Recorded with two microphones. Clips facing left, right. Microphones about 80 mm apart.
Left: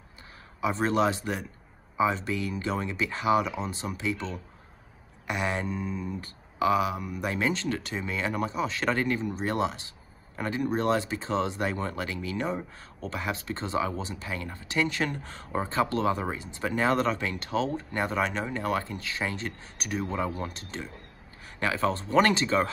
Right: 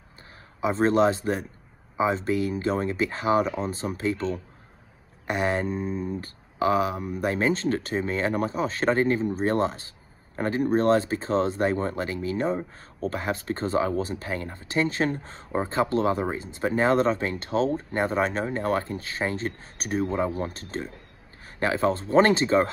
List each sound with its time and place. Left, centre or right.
0.6 s speech: right